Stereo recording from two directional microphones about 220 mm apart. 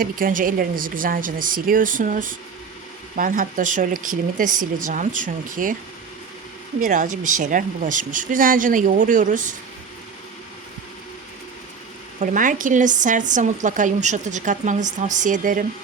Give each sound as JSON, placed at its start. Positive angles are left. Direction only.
{"t": 0.0, "sound": "speech", "side_deg": -40}
{"t": 6.7, "sound": "speech", "side_deg": -35}
{"t": 12.2, "sound": "speech", "side_deg": -35}